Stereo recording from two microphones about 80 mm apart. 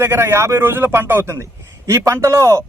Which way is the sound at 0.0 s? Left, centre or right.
Right.